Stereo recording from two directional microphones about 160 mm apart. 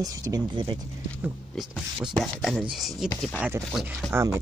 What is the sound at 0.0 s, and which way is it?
Speech, 25° right (ahead or behind).